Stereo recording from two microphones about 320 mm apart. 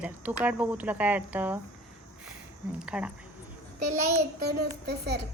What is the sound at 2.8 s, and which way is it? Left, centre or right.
Speech, centre.